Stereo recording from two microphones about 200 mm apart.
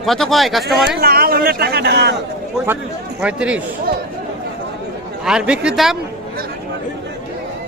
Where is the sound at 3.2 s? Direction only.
5° right (ahead or behind).